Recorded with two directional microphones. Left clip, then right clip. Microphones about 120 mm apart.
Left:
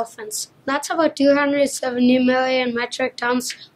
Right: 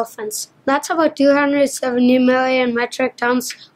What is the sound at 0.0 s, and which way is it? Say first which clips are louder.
A woman's voice: right 4 dB; 50° right (ahead or behind).